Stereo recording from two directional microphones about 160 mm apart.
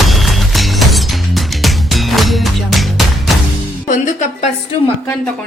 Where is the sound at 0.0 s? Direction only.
Centre (ahead or behind).